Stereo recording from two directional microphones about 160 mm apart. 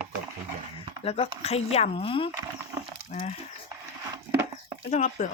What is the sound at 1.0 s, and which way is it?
Speech, 40° left (ahead or behind).